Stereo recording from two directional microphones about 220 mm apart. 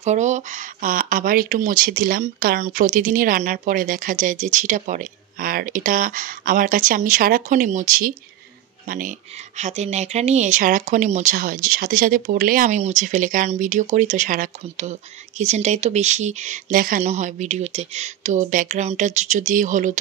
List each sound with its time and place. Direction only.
0.0 s speech: 30° right (ahead or behind)